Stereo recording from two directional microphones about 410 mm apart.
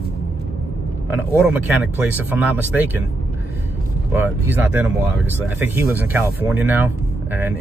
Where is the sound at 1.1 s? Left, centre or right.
Centre.